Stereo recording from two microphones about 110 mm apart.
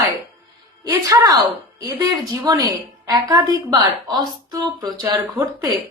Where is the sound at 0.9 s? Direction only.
35° right (ahead or behind).